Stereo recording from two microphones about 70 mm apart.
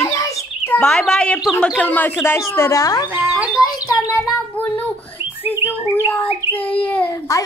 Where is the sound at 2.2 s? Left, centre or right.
Left.